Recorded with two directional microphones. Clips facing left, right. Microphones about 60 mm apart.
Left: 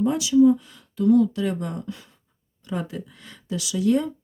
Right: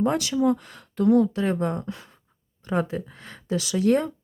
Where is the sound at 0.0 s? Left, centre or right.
Right.